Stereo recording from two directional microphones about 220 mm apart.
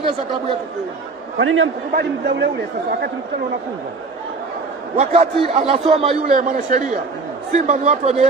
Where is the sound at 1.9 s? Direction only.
50° right (ahead or behind).